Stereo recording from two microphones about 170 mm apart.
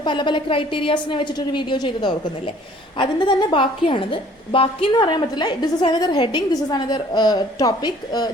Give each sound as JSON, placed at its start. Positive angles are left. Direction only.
{"t": 0.0, "sound": "a woman's voice", "side_deg": 25}